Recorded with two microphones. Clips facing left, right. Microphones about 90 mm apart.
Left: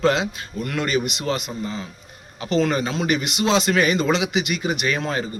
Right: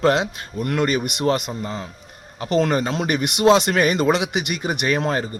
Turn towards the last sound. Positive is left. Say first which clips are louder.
# right 2 dB
turn(degrees=-45)  # may be behind; listen again after turning